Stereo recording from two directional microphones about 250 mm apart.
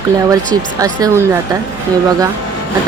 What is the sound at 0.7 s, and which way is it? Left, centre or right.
Speech, centre.